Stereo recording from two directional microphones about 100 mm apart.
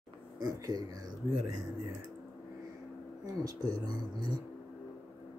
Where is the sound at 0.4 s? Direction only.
35° right (ahead or behind).